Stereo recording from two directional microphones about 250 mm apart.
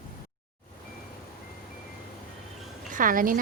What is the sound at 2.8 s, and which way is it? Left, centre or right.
Speech, right.